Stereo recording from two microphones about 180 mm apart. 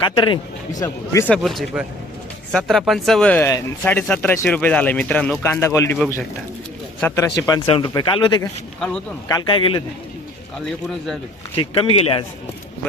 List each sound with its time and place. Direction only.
0.0 s speech: 30° left (ahead or behind)
1.3 s speech: centre (ahead or behind)
7.2 s speech: 20° left (ahead or behind)
11.5 s speech: 30° left (ahead or behind)